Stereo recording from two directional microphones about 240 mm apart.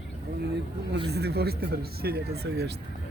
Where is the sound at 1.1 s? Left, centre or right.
Right.